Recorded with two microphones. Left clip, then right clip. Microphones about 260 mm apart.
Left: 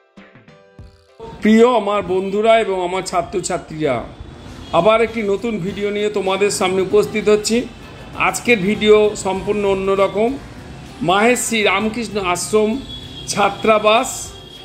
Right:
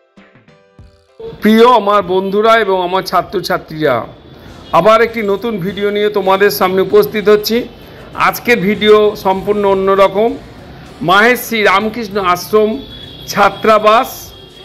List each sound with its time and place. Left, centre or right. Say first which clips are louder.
1.6 s a man's voice: right 7 dB; centre